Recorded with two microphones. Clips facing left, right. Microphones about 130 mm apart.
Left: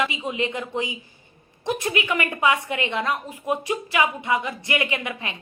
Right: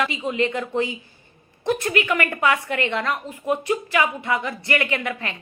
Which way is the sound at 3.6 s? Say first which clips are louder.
Even; 20° left (ahead or behind).